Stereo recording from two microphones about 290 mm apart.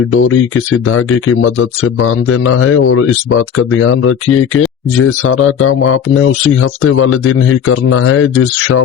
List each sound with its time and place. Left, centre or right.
0.1 s speech: left